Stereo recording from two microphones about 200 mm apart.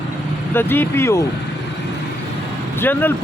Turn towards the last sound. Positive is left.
turn(degrees=10)  # may be behind; listen again after turning